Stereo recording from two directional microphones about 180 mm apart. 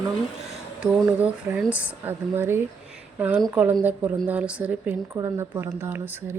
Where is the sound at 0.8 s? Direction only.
5° right (ahead or behind).